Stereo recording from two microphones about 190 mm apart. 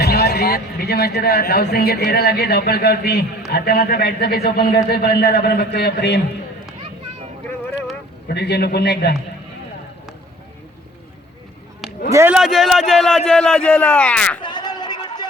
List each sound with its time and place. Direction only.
0.0 s speech: 55° left (ahead or behind)
8.3 s speech: 60° left (ahead or behind)
12.1 s a man's voice: 10° right (ahead or behind); by 14.3 s 5° left (ahead or behind)
14.4 s a sound: 20° left (ahead or behind)